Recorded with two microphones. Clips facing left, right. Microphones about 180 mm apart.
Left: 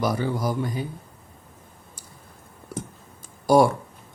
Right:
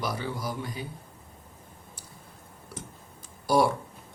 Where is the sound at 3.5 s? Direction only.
50° left (ahead or behind).